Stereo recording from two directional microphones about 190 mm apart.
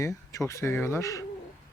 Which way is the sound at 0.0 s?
15° left (ahead or behind).